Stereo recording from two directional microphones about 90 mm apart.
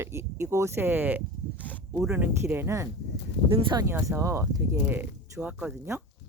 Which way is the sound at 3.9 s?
30° right (ahead or behind).